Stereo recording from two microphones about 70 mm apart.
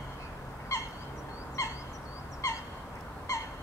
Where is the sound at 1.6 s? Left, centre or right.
Left.